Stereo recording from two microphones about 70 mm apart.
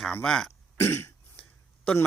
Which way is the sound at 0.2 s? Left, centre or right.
Centre.